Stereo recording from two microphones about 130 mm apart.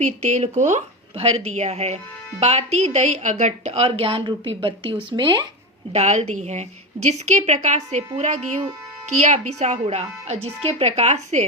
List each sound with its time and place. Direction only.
0.0 s a woman's voice: 65° right (ahead or behind)
1.1 s a woman's voice: 50° right (ahead or behind); by 5.5 s 35° right (ahead or behind)
5.9 s a woman's voice: 60° right (ahead or behind)